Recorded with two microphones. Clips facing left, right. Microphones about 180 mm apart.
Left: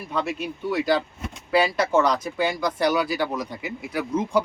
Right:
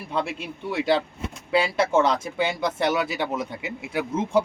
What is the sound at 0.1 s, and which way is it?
Speech, 30° right (ahead or behind).